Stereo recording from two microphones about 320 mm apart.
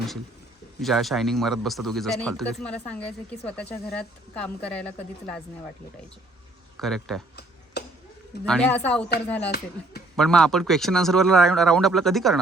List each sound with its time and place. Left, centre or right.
0.8 s speech: centre
6.7 s speech: centre
7.3 s a sound: left
8.4 s speech: centre